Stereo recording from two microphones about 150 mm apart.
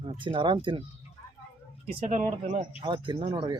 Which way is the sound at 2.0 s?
55° right (ahead or behind).